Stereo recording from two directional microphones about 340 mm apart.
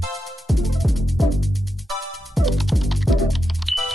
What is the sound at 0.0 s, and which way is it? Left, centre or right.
Music, centre.